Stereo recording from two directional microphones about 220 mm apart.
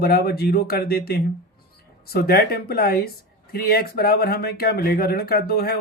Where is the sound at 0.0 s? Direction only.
45° left (ahead or behind).